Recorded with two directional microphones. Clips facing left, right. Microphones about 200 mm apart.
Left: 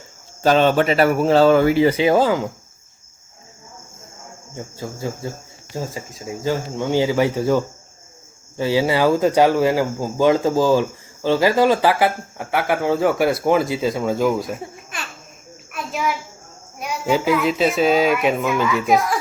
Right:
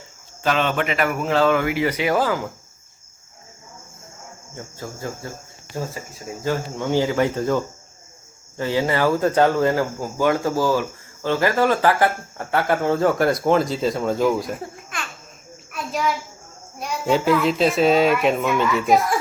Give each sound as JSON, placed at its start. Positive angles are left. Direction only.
{"t": 0.4, "sound": "speech", "side_deg": 35}
{"t": 4.5, "sound": "speech", "side_deg": 15}
{"t": 15.7, "sound": "insect", "side_deg": 5}
{"t": 16.8, "sound": "speech", "side_deg": 5}